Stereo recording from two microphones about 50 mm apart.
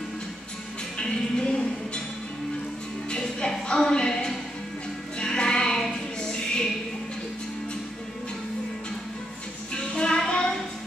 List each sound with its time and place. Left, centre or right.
0.9 s music: centre
3.1 s music: centre
9.8 s music: centre